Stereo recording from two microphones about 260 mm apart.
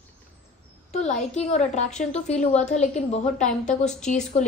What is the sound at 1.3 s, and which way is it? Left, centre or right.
A woman's voice, left.